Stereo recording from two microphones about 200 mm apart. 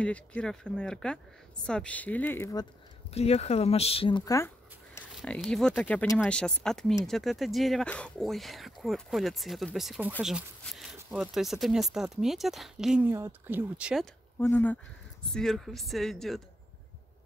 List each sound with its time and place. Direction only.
0.0 s speech: 5° left (ahead or behind)
3.2 s speech: 30° left (ahead or behind); by 4.5 s 15° left (ahead or behind)
5.1 s speech: centre (ahead or behind)
14.4 s speech: 10° left (ahead or behind)